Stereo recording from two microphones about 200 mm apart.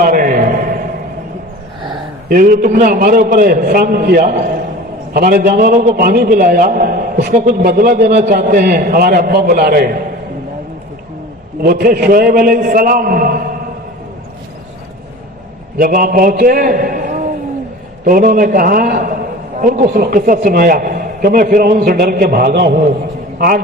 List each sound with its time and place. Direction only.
0.0 s a sound: 45° right (ahead or behind)
2.3 s a man's voice: 45° right (ahead or behind)
7.3 s a man's voice: 35° right (ahead or behind)
11.6 s a man's voice: 50° right (ahead or behind)
15.8 s a man's voice: 45° right (ahead or behind)